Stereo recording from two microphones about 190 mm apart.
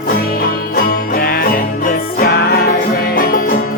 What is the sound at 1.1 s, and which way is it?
Music, 50° left (ahead or behind).